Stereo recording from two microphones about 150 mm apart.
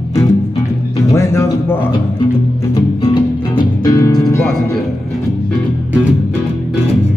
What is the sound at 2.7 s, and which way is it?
Music, 35° left (ahead or behind).